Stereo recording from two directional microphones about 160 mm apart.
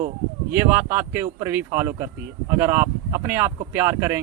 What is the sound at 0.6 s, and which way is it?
Speech, 15° right (ahead or behind).